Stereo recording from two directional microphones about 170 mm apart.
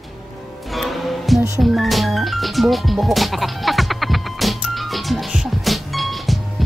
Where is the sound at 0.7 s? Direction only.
Centre (ahead or behind).